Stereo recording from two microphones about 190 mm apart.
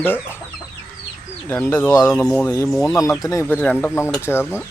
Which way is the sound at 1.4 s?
10° left (ahead or behind).